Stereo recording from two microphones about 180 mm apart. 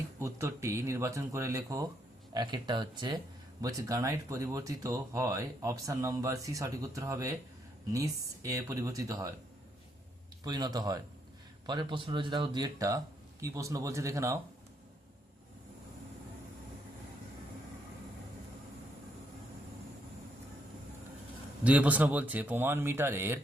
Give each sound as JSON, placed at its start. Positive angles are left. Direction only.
{"t": 0.2, "sound": "speech", "side_deg": -15}
{"t": 10.4, "sound": "speech", "side_deg": -20}
{"t": 21.6, "sound": "speech", "side_deg": -10}